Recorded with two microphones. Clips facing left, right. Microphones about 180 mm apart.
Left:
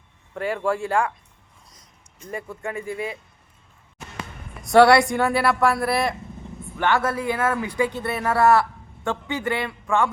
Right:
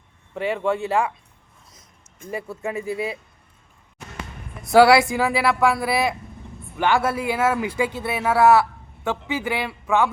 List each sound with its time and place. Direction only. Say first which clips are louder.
0.5 s speech: right 1 dB; centre (ahead or behind)
2.3 s speech: right 2 dB; 5° right (ahead or behind)
4.6 s speech: even; centre (ahead or behind)
6.4 s vehicle: left 2 dB; 20° left (ahead or behind)
6.7 s speech: right 1 dB; 10° right (ahead or behind)